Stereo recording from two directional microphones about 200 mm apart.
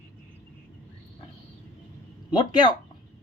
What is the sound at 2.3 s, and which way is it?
Speech, 20° left (ahead or behind).